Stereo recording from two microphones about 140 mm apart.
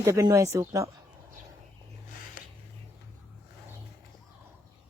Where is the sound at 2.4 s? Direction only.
75° left (ahead or behind).